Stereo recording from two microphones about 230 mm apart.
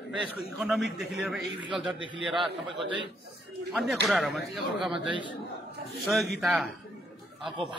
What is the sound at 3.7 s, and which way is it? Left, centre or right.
A man's voice, centre.